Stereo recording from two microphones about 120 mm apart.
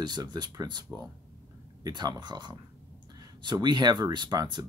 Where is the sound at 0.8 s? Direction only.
5° left (ahead or behind).